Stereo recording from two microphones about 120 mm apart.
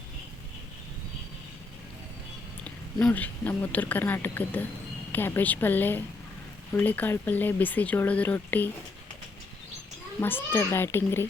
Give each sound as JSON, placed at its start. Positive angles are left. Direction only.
{"t": 3.1, "sound": "speech", "side_deg": 15}
{"t": 10.2, "sound": "a child's voice", "side_deg": 20}